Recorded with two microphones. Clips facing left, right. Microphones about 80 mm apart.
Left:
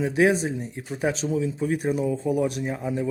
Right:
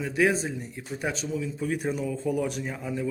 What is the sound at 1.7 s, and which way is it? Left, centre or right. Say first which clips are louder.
A man's voice: left 4 dB; centre.